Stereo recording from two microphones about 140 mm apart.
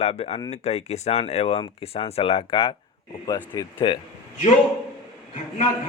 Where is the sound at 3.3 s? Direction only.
25° left (ahead or behind).